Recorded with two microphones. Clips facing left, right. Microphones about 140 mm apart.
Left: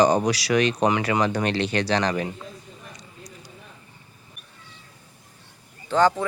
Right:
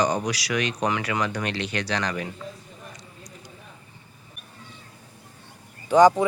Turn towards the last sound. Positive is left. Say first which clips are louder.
# right 4 dB
turn(degrees=-15)  # may be behind; listen again after turning